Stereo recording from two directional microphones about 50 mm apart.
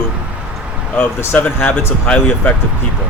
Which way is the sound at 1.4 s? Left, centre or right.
Left.